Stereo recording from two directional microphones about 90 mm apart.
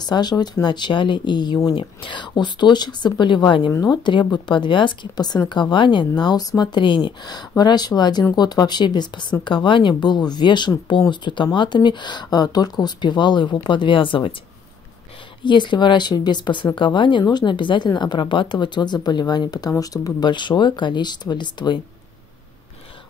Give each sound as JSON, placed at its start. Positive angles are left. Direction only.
{"t": 0.0, "sound": "speech", "side_deg": 50}
{"t": 1.8, "sound": "speech", "side_deg": 65}
{"t": 3.7, "sound": "speech", "side_deg": 50}
{"t": 5.5, "sound": "speech", "side_deg": 60}
{"t": 15.4, "sound": "speech", "side_deg": 60}